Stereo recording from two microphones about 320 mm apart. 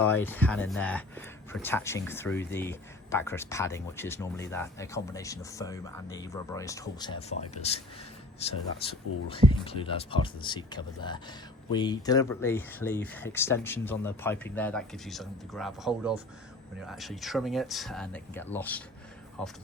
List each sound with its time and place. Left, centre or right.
0.0 s speech: centre
9.6 s speech: centre